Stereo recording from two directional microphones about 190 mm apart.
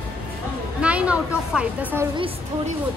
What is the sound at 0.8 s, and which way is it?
Speech, 5° right (ahead or behind).